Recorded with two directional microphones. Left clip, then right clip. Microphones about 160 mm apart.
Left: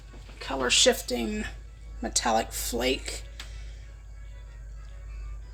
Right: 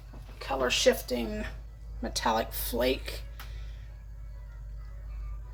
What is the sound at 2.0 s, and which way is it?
Speech, 35° left (ahead or behind).